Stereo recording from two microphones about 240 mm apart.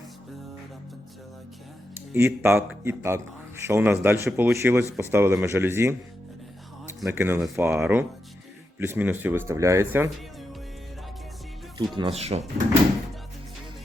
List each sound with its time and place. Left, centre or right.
2.1 s a man's voice: centre
11.9 s speech: right